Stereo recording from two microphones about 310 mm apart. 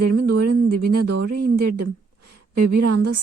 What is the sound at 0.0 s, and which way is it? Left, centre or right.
A woman's voice, right.